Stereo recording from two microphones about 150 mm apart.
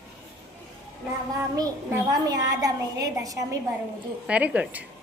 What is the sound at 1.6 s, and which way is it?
A woman's voice, 25° right (ahead or behind).